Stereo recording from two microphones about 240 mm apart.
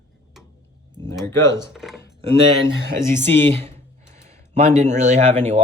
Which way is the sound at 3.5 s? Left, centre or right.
Right.